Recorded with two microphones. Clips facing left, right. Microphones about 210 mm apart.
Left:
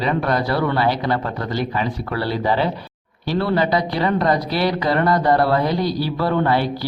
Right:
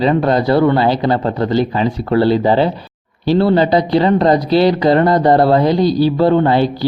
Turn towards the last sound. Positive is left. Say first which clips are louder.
# right 6 dB
turn(degrees=-25)  # may be behind; listen again after turning